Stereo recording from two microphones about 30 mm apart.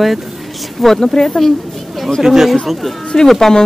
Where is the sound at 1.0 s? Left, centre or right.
Centre.